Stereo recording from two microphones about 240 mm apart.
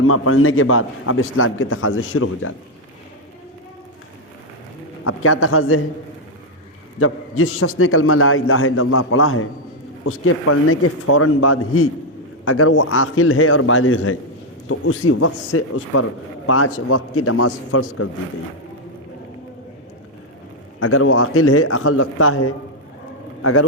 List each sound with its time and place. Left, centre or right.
0.0 s a man's voice: left
5.0 s a man's voice: left
7.0 s a man's voice: left
20.7 s a man's voice: left